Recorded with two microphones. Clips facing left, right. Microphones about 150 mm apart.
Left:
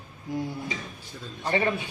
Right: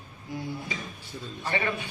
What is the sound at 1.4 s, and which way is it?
Speech, 30° left (ahead or behind).